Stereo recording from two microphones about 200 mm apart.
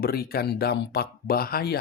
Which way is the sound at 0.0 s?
50° left (ahead or behind).